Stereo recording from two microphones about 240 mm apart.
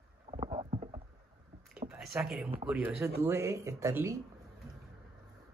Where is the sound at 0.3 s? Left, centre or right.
Right.